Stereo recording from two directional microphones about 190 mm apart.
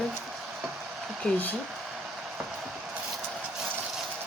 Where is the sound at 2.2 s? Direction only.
5° right (ahead or behind).